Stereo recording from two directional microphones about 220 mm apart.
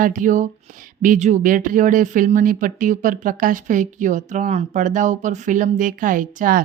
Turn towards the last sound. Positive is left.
turn(degrees=-40)  # may be behind; listen again after turning